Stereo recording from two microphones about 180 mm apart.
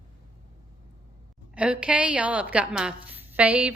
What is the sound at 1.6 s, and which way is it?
A woman's voice, 5° right (ahead or behind).